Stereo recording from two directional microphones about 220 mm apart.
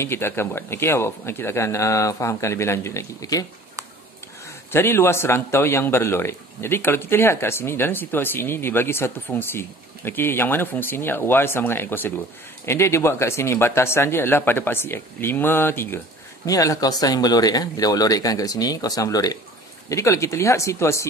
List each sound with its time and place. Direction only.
0.0 s a man's voice: 10° left (ahead or behind)
4.7 s a man's voice: 10° left (ahead or behind)